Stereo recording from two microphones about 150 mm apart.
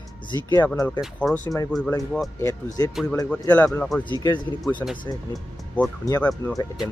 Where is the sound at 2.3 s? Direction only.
20° left (ahead or behind).